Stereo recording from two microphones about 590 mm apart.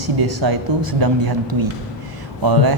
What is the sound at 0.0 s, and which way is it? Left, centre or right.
A woman's voice, right.